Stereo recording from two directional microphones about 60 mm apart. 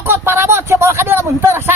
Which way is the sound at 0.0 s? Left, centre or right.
Right.